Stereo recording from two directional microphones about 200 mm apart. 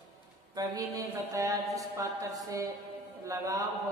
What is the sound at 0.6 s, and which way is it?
A man's voice, 15° right (ahead or behind).